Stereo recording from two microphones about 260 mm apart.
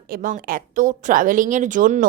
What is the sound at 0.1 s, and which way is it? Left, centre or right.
A woman's voice, right.